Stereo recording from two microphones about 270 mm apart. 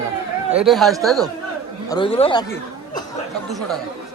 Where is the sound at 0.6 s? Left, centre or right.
Centre.